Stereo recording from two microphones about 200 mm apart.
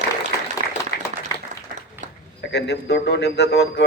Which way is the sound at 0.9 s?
55° left (ahead or behind).